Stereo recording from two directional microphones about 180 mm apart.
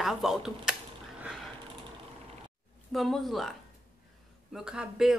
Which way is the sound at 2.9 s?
Centre (ahead or behind).